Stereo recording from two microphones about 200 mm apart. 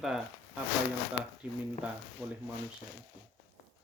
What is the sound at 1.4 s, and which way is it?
Speech, 5° right (ahead or behind).